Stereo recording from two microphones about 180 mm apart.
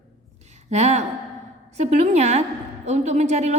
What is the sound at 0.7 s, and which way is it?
A woman's voice, 40° right (ahead or behind).